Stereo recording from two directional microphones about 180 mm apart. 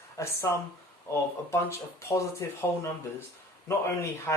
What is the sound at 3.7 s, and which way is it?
Speech, 15° left (ahead or behind).